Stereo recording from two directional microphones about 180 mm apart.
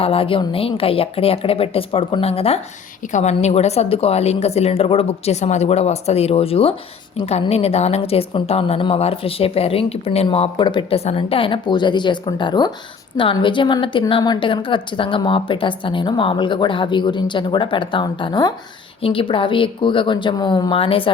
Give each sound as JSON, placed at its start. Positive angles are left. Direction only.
{"t": 0.0, "sound": "a woman's voice", "side_deg": 30}